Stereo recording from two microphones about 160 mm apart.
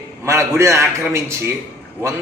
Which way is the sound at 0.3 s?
15° right (ahead or behind).